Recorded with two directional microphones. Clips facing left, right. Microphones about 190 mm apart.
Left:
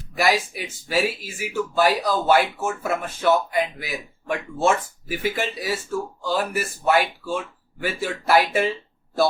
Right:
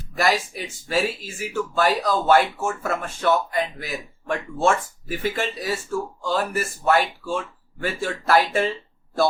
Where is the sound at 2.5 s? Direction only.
15° left (ahead or behind).